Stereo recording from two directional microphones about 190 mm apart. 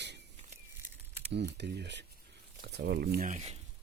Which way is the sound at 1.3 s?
60° right (ahead or behind).